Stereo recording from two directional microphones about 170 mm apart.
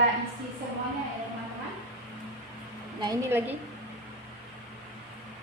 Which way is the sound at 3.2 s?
10° right (ahead or behind).